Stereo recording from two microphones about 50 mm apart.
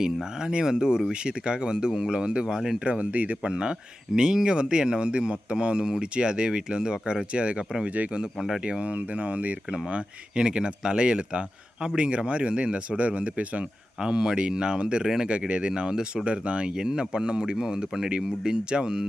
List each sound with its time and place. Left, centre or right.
0.0 s speech: centre
2.8 s speech: right
8.4 s speech: centre
8.8 s speech: right
9.6 s speech: centre